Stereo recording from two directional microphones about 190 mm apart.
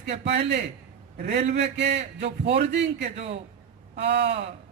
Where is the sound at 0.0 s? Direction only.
65° right (ahead or behind).